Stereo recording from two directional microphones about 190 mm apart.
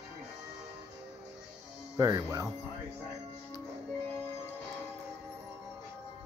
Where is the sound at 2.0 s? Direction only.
20° right (ahead or behind).